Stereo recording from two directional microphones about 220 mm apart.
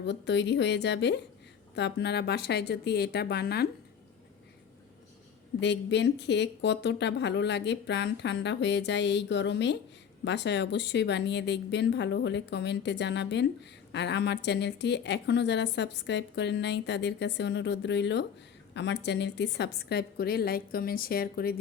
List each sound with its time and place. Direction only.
0.0 s a woman's voice: 50° left (ahead or behind)
5.5 s a woman's voice: 50° left (ahead or behind)